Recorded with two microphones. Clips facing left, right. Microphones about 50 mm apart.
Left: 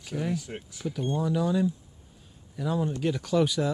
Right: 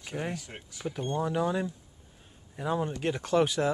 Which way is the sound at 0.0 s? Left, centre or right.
Right.